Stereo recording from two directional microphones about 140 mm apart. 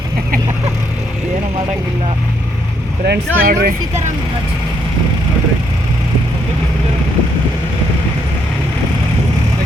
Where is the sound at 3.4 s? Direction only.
90° right.